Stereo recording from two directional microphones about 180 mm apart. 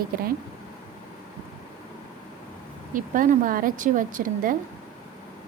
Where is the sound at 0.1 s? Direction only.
55° right (ahead or behind).